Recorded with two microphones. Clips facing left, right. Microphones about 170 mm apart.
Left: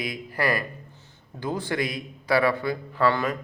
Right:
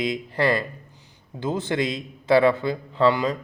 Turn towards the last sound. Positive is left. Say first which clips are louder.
# right 3 dB
turn(degrees=-20)  # may be behind; listen again after turning